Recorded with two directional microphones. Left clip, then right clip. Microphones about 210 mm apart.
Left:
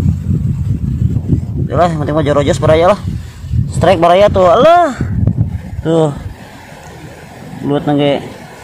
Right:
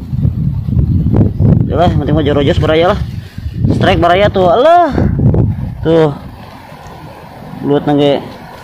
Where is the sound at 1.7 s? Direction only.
15° left (ahead or behind); by 6.1 s centre (ahead or behind).